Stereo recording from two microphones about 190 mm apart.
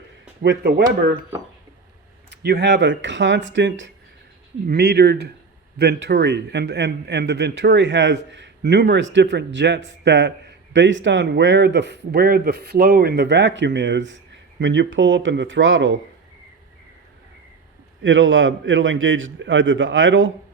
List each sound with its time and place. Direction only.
0.4 s speech: 60° right (ahead or behind)
2.4 s a man's voice: 60° right (ahead or behind)
4.7 s a man's voice: 55° right (ahead or behind); by 16.0 s 90° right
18.0 s a man's voice: 85° right